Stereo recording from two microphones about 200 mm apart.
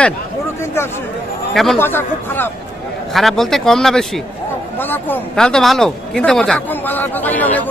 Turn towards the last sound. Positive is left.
turn(degrees=10)  # may be behind; listen again after turning